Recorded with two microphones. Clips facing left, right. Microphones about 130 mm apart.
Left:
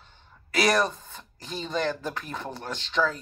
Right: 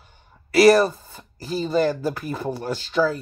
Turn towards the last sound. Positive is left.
turn(degrees=-5)  # may be behind; listen again after turning